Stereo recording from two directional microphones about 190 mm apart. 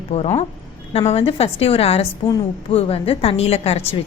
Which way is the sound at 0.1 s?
35° left (ahead or behind).